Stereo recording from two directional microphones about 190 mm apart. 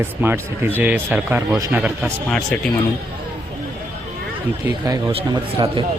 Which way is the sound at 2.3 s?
5° left (ahead or behind).